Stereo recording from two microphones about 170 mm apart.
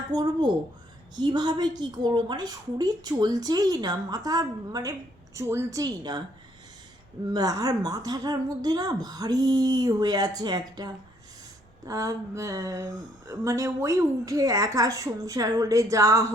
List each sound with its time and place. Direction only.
0.1 s a woman's voice: 25° right (ahead or behind)
7.3 s a woman's voice: 20° right (ahead or behind)